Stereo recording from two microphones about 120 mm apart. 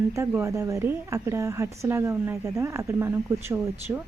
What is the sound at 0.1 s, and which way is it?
A woman's voice, 25° right (ahead or behind).